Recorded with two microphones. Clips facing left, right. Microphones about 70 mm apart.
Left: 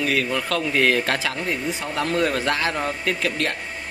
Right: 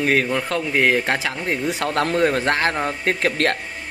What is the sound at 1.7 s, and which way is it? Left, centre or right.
Speech, right.